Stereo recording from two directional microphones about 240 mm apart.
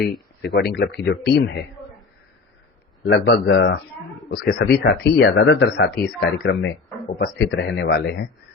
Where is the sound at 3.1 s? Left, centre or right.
Left.